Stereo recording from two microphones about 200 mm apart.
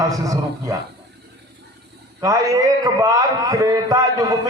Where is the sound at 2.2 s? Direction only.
15° right (ahead or behind).